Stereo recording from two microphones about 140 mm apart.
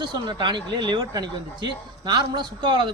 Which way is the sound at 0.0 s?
35° right (ahead or behind).